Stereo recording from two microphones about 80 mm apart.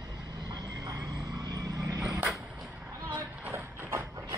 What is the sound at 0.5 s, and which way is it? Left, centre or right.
Vehicle, right.